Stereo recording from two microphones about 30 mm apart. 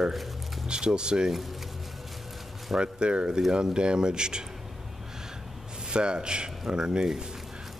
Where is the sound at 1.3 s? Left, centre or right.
Centre.